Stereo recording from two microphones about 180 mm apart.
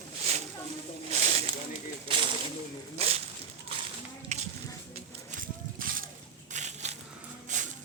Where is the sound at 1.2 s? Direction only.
35° right (ahead or behind).